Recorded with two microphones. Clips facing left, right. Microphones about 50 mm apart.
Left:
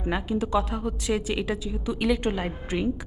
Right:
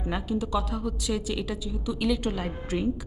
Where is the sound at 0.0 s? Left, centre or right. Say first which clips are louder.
Left 2 dB; left.